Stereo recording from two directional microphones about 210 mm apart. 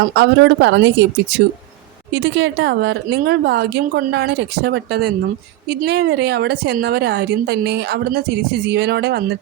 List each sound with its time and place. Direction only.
0.2 s a woman's voice: 55° right (ahead or behind)